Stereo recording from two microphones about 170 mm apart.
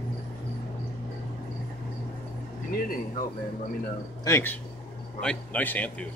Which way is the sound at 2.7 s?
55° left (ahead or behind).